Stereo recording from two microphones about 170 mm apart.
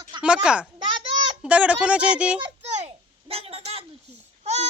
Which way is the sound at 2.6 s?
40° right (ahead or behind).